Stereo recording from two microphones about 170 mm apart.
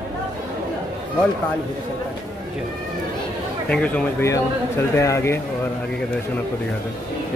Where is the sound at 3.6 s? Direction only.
5° left (ahead or behind).